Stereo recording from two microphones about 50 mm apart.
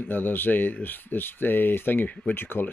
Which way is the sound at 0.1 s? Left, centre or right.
Left.